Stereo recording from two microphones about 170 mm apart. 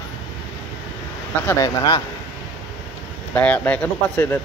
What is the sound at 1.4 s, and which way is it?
Speech, 20° left (ahead or behind).